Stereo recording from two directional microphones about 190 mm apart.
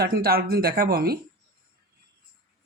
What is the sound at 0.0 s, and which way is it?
Speech, 55° right (ahead or behind).